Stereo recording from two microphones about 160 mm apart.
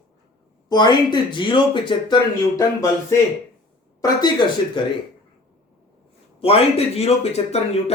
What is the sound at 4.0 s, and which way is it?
Speech, 25° left (ahead or behind).